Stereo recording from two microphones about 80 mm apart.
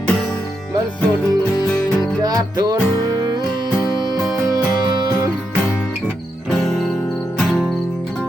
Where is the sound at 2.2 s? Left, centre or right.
Right.